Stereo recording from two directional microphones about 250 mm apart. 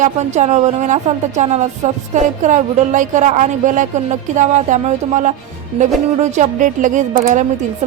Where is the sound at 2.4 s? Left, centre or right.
Right.